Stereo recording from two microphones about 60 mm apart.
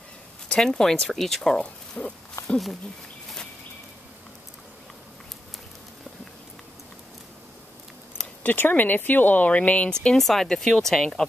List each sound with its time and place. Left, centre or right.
0.5 s speech: centre
2.0 s speech: left
2.4 s speech: centre
8.5 s speech: left
10.0 s speech: centre